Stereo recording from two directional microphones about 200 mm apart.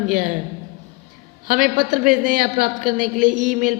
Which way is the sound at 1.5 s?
40° right (ahead or behind).